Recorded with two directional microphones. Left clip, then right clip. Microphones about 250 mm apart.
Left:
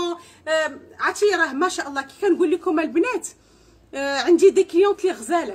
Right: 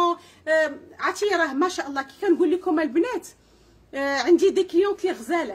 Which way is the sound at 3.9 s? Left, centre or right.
Centre.